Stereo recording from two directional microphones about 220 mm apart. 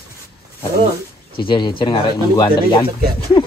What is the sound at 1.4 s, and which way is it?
Speech, 20° left (ahead or behind).